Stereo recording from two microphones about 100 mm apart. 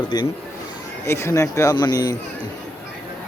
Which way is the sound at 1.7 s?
45° left (ahead or behind).